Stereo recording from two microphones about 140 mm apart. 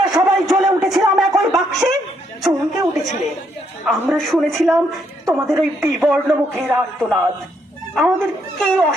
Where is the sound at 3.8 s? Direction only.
Centre (ahead or behind).